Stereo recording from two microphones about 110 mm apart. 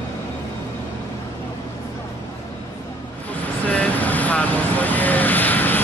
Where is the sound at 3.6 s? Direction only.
15° left (ahead or behind).